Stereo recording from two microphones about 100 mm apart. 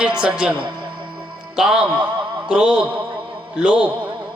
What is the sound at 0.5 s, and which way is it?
Speech, 55° right (ahead or behind).